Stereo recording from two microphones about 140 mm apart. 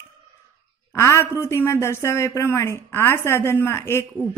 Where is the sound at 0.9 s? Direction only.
20° left (ahead or behind).